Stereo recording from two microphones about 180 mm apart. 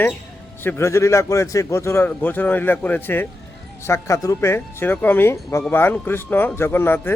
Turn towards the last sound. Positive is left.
turn(degrees=10)  # may be behind; listen again after turning